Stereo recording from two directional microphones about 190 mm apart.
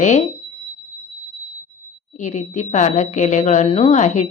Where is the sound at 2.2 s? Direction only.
40° left (ahead or behind).